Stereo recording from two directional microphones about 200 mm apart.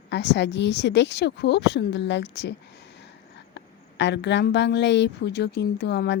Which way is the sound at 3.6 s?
60° left (ahead or behind).